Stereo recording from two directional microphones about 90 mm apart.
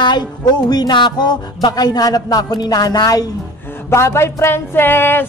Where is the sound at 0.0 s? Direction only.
55° left (ahead or behind).